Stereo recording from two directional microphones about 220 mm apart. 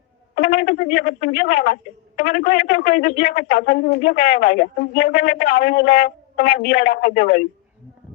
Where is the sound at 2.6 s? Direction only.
50° left (ahead or behind).